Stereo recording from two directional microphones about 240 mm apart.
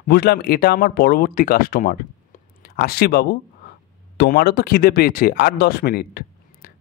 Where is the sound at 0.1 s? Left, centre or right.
Left.